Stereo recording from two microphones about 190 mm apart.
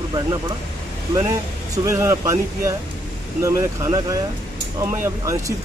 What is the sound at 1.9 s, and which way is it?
Speech, 15° right (ahead or behind).